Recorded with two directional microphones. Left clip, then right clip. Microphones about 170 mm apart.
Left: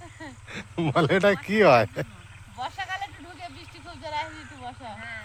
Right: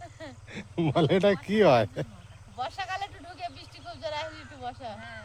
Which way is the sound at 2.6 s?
35° right (ahead or behind).